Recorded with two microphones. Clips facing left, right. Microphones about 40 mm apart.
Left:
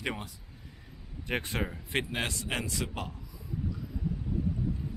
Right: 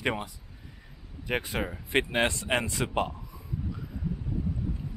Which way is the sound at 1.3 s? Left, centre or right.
Centre.